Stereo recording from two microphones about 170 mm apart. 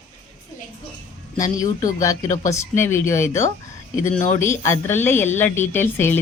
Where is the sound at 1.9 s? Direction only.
20° left (ahead or behind).